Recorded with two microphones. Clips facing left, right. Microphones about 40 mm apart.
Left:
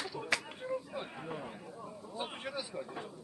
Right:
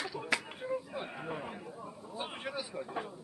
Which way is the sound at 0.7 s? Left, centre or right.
Centre.